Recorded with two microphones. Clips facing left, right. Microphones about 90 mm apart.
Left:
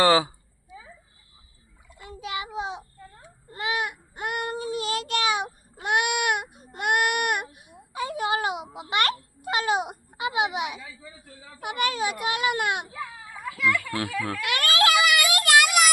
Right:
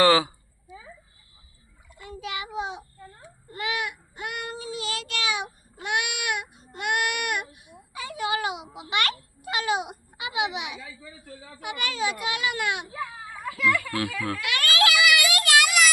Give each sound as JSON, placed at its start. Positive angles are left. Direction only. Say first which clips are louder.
{"t": 0.0, "sound": "speech", "louder": "even", "side_deg": 20}
{"t": 2.0, "sound": "child singing", "louder": "left 1 dB", "side_deg": 30}
{"t": 11.6, "sound": "a child's voice", "louder": "left 2 dB", "side_deg": 50}
{"t": 13.9, "sound": "speech", "louder": "even", "side_deg": 25}
{"t": 14.4, "sound": "a sound", "louder": "left 1 dB", "side_deg": 45}